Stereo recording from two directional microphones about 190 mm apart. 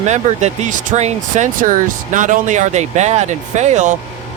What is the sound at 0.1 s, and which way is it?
Speech, 40° right (ahead or behind).